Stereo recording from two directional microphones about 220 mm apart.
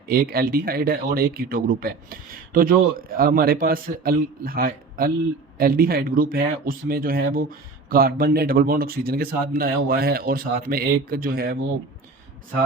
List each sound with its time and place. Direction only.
0.1 s speech: 45° right (ahead or behind)